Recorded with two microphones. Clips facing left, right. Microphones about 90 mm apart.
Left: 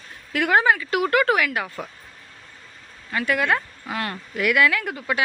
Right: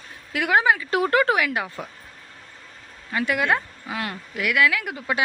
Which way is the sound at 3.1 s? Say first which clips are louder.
Even; 20° right (ahead or behind).